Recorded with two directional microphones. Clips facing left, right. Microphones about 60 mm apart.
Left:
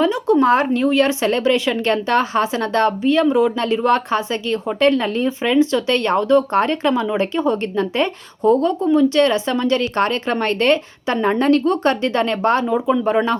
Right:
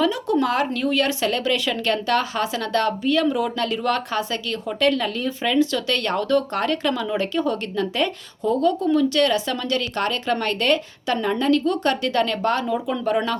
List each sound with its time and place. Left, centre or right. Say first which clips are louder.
0.0 s speech: left 5 dB; left